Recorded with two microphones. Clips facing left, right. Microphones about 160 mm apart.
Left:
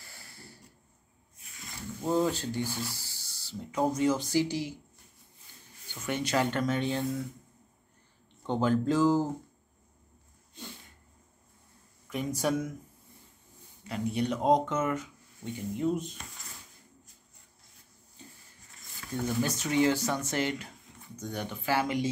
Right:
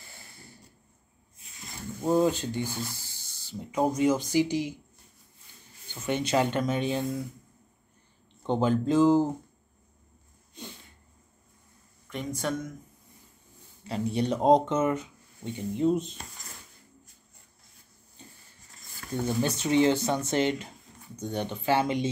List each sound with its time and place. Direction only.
2.0 s speech: 15° right (ahead or behind)
6.0 s speech: 20° right (ahead or behind)
8.5 s speech: 20° right (ahead or behind)
12.4 s speech: 10° left (ahead or behind)
13.8 s speech: 30° right (ahead or behind)
19.2 s speech: 25° right (ahead or behind)